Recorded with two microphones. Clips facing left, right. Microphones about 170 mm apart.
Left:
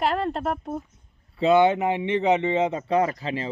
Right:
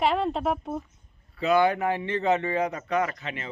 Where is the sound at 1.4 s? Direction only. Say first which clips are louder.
Left 4 dB; 25° left (ahead or behind).